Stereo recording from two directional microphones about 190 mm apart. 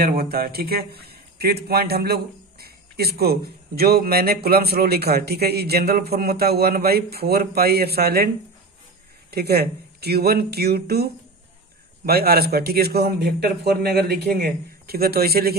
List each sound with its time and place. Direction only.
0.0 s a man's voice: 50° right (ahead or behind)
9.3 s a man's voice: 55° right (ahead or behind)
12.1 s a man's voice: 55° right (ahead or behind)